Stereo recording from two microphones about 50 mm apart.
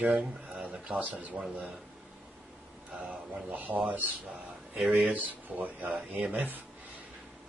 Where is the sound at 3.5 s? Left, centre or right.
Right.